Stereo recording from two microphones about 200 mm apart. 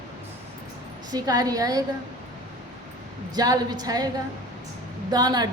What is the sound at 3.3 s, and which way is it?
Speech, 20° right (ahead or behind).